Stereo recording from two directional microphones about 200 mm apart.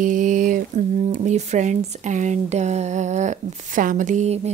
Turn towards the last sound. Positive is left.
turn(degrees=-35)  # may be behind; listen again after turning